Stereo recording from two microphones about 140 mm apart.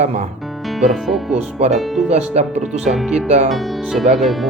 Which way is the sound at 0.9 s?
Centre (ahead or behind).